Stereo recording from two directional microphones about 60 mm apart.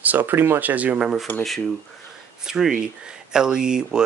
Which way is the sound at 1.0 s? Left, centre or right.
Centre.